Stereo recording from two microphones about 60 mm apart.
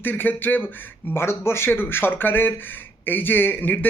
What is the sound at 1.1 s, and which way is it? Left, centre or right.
Speech, left.